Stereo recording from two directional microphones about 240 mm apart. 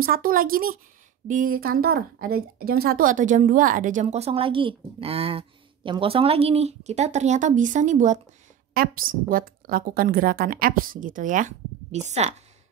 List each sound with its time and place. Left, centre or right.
0.0 s a woman's voice: right